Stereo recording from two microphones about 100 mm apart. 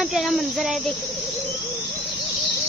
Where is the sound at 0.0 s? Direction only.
Centre (ahead or behind).